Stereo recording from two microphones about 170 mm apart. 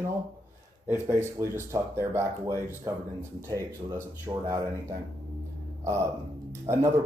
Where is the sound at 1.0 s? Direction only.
15° right (ahead or behind).